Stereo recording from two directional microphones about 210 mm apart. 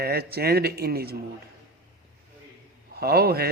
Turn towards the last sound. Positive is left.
turn(degrees=-45)  # may be behind; listen again after turning